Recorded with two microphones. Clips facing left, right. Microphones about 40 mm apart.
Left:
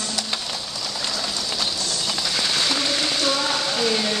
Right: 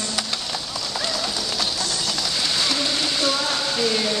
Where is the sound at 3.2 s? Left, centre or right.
Centre.